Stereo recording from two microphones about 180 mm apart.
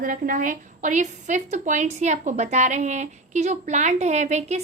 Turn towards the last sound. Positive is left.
turn(degrees=-40)  # may be behind; listen again after turning